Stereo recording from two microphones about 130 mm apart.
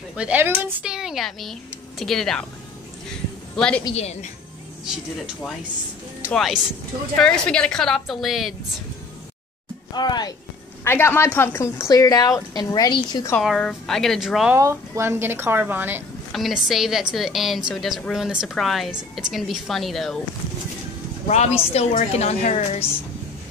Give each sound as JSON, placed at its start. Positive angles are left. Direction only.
{"t": 0.1, "sound": "speech", "side_deg": -10}
{"t": 3.5, "sound": "a woman's voice", "side_deg": 5}
{"t": 3.9, "sound": "a woman's voice", "side_deg": 55}
{"t": 4.8, "sound": "speech", "side_deg": -5}
{"t": 9.9, "sound": "speech", "side_deg": 35}
{"t": 10.8, "sound": "a woman's voice", "side_deg": 20}
{"t": 13.4, "sound": "speech", "side_deg": 0}
{"t": 14.5, "sound": "a woman's voice", "side_deg": -20}
{"t": 16.3, "sound": "speech", "side_deg": 0}
{"t": 21.3, "sound": "a woman's voice", "side_deg": 55}